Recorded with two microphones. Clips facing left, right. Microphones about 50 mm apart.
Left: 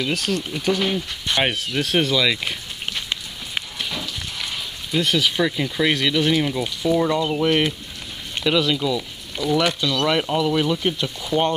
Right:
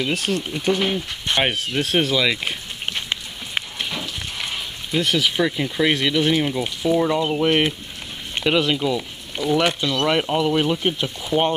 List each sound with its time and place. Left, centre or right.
0.0 s a sound: centre
5.0 s speech: centre
11.2 s speech: centre